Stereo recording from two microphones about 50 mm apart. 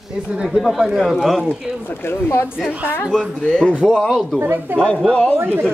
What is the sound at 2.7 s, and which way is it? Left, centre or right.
Speech, left.